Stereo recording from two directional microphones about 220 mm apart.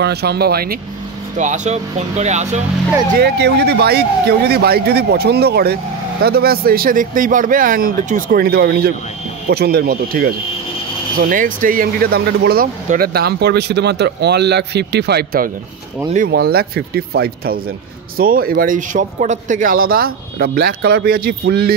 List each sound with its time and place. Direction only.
0.0 s speech: 45° right (ahead or behind)
1.4 s a man's voice: 35° right (ahead or behind)
3.2 s a man's voice: 50° right (ahead or behind)